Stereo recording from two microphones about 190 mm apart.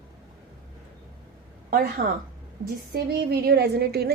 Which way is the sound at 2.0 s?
50° right (ahead or behind).